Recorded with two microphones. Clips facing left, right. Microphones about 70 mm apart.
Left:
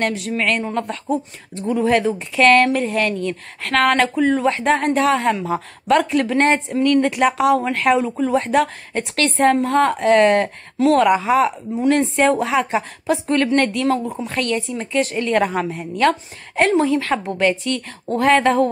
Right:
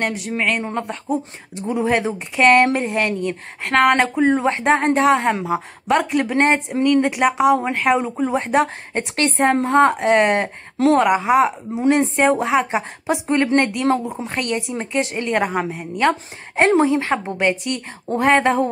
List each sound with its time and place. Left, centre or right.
0.0 s speech: centre; by 5.4 s right
5.4 s speech: centre
16.5 s speech: right